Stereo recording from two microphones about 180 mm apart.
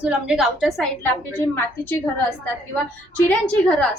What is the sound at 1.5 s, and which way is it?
Speech, 15° left (ahead or behind).